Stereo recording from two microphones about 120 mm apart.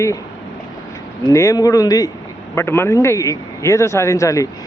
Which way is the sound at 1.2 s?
25° left (ahead or behind).